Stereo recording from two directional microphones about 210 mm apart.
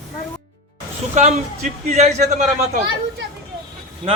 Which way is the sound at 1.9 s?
30° right (ahead or behind).